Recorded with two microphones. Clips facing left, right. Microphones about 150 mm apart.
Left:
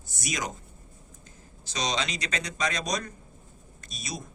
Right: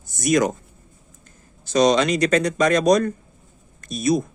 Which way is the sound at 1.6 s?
50° right (ahead or behind).